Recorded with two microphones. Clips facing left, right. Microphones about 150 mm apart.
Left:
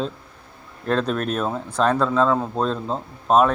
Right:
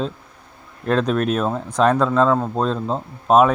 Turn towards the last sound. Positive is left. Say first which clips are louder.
# right 3 dB
turn(degrees=-5)  # may be behind; listen again after turning